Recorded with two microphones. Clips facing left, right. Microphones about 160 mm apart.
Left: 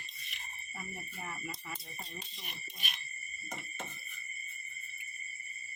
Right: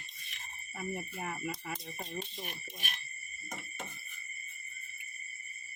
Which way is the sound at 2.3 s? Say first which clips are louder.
Right 6 dB; 50° right (ahead or behind).